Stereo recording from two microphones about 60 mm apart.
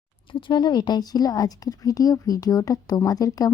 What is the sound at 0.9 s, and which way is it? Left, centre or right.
Speech, left.